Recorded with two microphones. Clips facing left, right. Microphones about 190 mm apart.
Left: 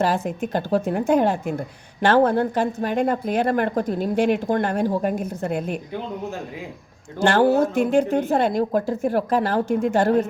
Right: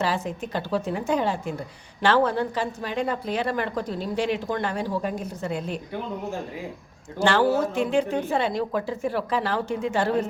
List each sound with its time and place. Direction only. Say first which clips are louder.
0.0 s a woman's voice: left 5 dB; 50° left (ahead or behind)
7.2 s a woman's voice: left 4 dB; 50° left (ahead or behind)